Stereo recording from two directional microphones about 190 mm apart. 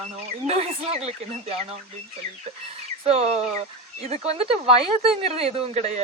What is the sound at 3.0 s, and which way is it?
A woman's voice, 35° right (ahead or behind).